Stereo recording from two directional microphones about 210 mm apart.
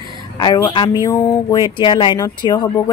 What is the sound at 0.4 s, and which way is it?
Speech, 20° left (ahead or behind).